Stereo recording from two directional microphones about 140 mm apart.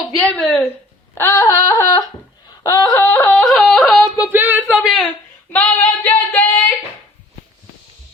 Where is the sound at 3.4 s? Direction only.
5° left (ahead or behind).